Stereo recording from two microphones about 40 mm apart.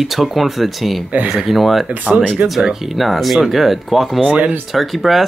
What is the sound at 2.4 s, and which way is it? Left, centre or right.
Speech, right.